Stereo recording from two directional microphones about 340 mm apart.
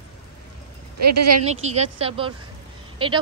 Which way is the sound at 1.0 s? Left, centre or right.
Right.